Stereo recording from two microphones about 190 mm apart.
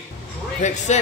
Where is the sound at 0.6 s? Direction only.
40° left (ahead or behind).